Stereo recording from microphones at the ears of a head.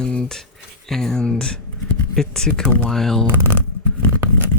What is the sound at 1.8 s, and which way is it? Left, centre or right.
Speech, left.